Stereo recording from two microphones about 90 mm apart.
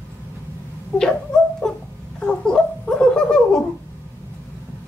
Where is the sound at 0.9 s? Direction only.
25° left (ahead or behind).